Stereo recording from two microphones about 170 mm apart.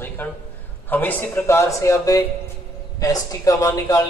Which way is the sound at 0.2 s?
10° left (ahead or behind).